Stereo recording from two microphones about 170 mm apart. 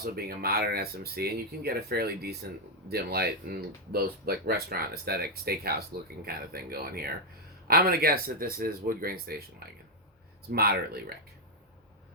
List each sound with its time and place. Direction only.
0.0 s speech: 65° right (ahead or behind)